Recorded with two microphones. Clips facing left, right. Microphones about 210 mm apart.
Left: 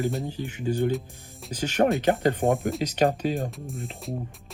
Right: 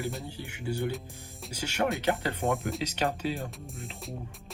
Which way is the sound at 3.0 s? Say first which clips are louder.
Left 8 dB; 45° left (ahead or behind).